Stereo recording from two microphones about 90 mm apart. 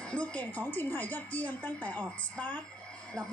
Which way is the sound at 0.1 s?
15° left (ahead or behind).